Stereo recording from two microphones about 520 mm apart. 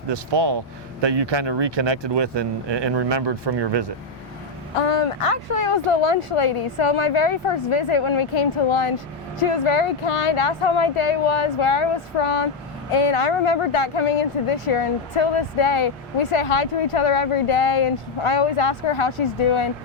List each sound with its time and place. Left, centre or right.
0.1 s speech: right
4.8 s speech: left